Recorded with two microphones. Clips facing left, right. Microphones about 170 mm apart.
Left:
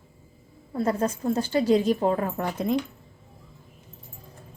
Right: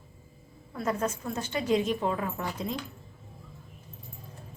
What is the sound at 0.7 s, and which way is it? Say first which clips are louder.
A woman's voice: left 5 dB; 30° left (ahead or behind).